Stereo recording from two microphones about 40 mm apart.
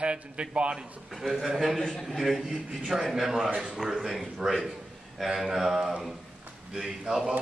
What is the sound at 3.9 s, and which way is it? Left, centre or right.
Speech, centre.